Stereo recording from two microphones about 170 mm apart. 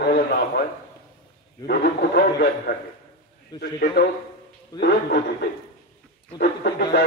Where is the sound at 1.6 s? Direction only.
75° left (ahead or behind).